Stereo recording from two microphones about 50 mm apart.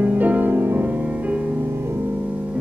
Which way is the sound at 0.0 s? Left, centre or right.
Right.